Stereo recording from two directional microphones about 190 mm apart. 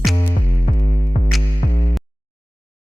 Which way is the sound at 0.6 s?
40° left (ahead or behind).